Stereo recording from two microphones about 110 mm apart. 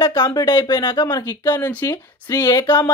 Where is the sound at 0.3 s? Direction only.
40° left (ahead or behind).